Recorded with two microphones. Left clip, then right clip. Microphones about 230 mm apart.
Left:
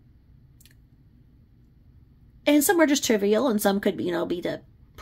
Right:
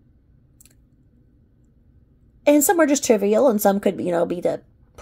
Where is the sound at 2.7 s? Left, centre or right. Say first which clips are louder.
Right 4 dB; centre.